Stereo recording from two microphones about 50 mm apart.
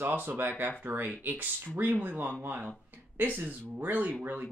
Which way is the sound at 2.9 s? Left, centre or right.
Right.